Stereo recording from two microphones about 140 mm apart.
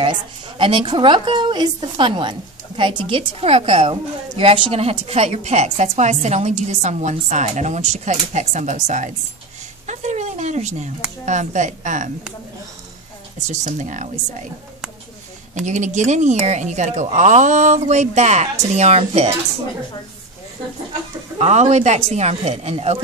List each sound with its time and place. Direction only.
0.0 s a woman's voice: 40° right (ahead or behind); by 9.1 s 60° right (ahead or behind)
9.8 s a sound: 55° right (ahead or behind)
11.2 s a woman's voice: 60° right (ahead or behind)
13.5 s a woman's voice: 60° right (ahead or behind)
15.5 s a woman's voice: 60° right (ahead or behind)
21.4 s speech: 55° right (ahead or behind)